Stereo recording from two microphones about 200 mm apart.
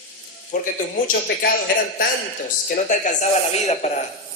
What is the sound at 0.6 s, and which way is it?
Speech, 45° left (ahead or behind).